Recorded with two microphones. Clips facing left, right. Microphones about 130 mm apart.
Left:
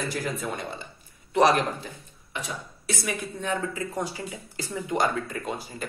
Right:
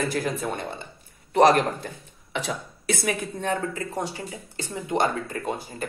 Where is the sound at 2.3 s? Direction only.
80° right; by 3.2 s 55° right (ahead or behind).